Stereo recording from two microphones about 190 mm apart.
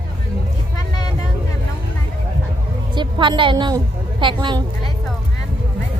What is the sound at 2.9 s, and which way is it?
A woman's voice, 25° right (ahead or behind).